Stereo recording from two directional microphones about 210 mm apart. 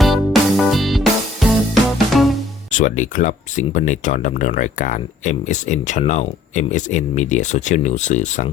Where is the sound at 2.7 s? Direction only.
35° left (ahead or behind).